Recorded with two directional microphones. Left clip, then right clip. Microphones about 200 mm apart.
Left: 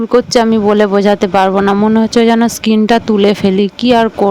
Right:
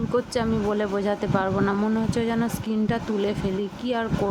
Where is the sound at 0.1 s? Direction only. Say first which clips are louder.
Left 15 dB; 40° left (ahead or behind).